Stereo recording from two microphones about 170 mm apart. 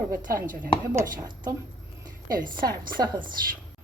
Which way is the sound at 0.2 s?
55° right (ahead or behind).